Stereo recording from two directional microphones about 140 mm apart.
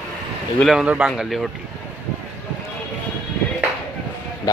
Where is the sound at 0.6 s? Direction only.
5° right (ahead or behind).